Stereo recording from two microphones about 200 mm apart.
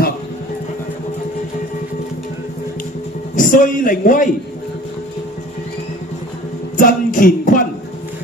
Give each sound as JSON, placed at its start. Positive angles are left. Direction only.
{"t": 3.3, "sound": "a man's voice", "side_deg": 40}
{"t": 6.8, "sound": "music", "side_deg": 45}